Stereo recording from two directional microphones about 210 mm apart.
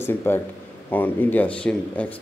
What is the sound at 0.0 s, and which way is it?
Speech, 10° left (ahead or behind).